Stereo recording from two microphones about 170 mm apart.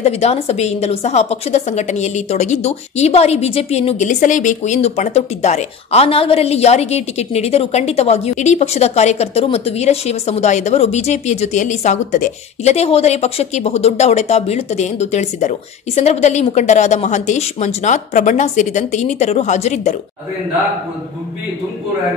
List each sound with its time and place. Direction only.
0.0 s a woman's voice: 40° left (ahead or behind)